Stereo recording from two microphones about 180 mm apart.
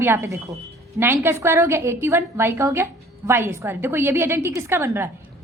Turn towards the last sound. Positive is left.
turn(degrees=-15)  # may be behind; listen again after turning